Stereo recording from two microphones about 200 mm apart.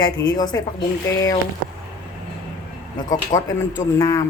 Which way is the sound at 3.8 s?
15° left (ahead or behind).